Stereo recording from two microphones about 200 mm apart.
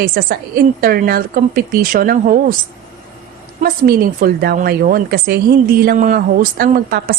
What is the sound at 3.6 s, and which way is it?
A woman's voice, 50° right (ahead or behind).